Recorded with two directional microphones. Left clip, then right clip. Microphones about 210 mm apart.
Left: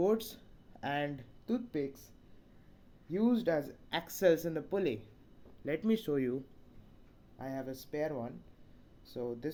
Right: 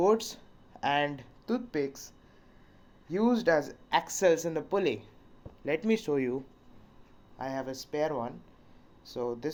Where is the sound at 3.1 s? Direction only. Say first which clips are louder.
Right 6 dB; 40° left (ahead or behind).